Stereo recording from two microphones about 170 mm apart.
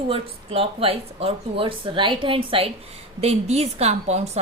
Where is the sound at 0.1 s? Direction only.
35° right (ahead or behind).